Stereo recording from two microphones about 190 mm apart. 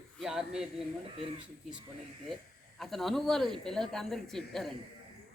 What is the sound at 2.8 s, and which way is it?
Speech, centre (ahead or behind).